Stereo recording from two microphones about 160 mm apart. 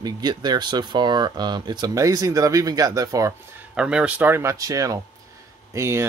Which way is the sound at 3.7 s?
5° right (ahead or behind).